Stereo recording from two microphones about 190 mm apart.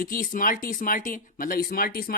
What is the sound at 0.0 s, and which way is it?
Speech, 50° left (ahead or behind).